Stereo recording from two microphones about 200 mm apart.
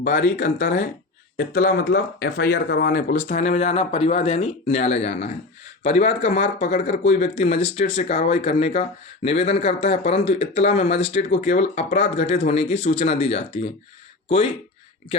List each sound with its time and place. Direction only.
0.0 s speech: 50° left (ahead or behind); by 13.6 s 30° left (ahead or behind)